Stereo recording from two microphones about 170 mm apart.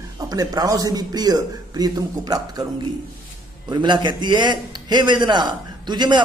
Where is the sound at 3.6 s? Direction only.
25° right (ahead or behind).